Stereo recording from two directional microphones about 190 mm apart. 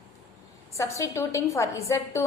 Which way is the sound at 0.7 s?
15° left (ahead or behind).